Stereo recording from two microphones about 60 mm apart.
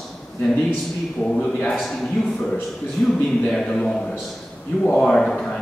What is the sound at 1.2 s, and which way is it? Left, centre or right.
Speech, centre.